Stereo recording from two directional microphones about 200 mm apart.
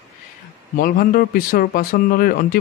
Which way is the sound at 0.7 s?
45° left (ahead or behind).